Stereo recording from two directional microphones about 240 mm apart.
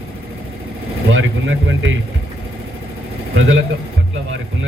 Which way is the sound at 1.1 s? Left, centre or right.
Right.